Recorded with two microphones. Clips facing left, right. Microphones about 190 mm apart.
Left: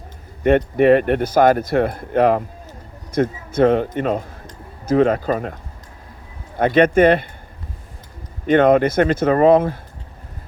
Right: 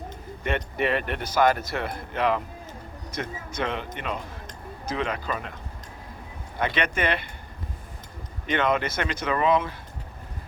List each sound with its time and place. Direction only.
0.4 s a man's voice: 50° left (ahead or behind)
6.6 s a man's voice: 50° left (ahead or behind)
8.4 s a man's voice: 50° left (ahead or behind)